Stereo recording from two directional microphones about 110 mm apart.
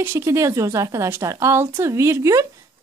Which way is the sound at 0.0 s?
25° right (ahead or behind).